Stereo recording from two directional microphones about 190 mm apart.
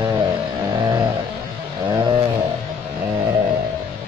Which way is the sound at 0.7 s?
20° right (ahead or behind).